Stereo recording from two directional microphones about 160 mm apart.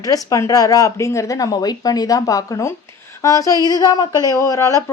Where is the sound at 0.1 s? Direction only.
20° left (ahead or behind).